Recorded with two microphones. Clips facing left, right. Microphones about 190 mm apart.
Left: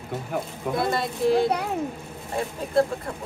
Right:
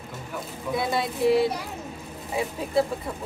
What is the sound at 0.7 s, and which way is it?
Speech, centre (ahead or behind).